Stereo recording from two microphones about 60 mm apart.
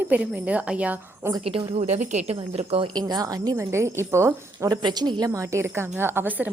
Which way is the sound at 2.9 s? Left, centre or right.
Right.